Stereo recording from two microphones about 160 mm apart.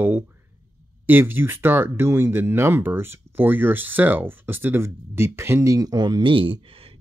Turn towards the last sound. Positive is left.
turn(degrees=-35)  # may be behind; listen again after turning